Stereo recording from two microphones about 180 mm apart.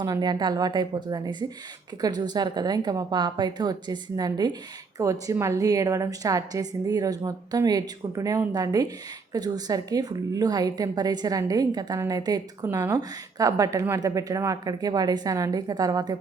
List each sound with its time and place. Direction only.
0.0 s a woman's voice: 20° right (ahead or behind)